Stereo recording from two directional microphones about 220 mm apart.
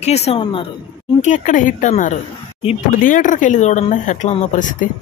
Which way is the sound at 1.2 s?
35° left (ahead or behind).